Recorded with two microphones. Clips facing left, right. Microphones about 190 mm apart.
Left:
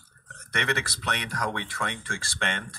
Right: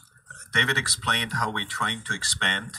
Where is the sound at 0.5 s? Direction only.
55° left (ahead or behind).